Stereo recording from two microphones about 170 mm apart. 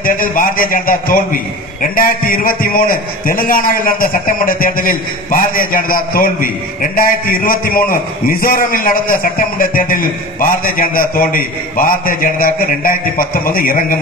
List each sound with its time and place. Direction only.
0.0 s a man's voice: 55° left (ahead or behind)